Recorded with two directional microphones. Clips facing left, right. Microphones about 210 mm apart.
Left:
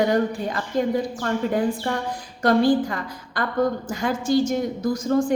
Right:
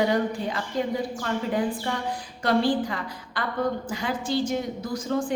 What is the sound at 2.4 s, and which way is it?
A woman's voice, 45° left (ahead or behind).